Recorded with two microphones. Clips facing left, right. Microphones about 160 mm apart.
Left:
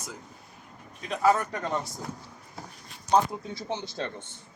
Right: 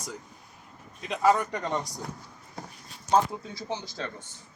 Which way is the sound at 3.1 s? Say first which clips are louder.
Even; 20° left (ahead or behind).